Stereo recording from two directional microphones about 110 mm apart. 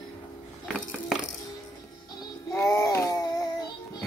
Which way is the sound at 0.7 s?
5° left (ahead or behind).